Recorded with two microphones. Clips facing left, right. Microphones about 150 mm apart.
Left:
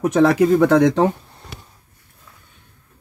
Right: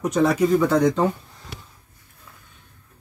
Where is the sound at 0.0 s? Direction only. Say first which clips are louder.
Left 5 dB; 65° left (ahead or behind).